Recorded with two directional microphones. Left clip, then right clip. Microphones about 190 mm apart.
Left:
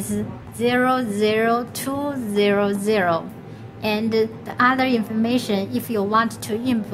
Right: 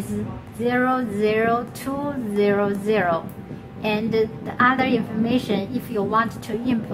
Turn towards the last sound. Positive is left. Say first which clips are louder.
# left 1 dB
turn(degrees=45)  # may be behind; listen again after turning